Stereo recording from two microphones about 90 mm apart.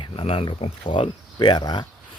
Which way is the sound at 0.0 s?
80° left.